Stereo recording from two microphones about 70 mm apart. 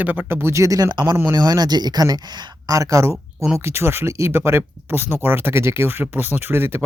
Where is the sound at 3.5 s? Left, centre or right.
Right.